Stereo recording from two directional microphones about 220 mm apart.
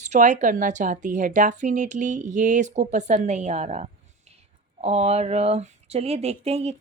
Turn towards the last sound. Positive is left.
turn(degrees=-30)  # may be behind; listen again after turning